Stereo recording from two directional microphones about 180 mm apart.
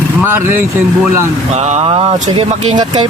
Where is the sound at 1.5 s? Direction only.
35° right (ahead or behind).